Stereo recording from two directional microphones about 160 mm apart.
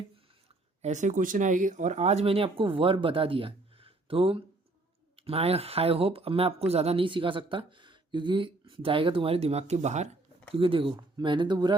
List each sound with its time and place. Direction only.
0.8 s speech: 50° right (ahead or behind)
10.5 s speech: 35° right (ahead or behind)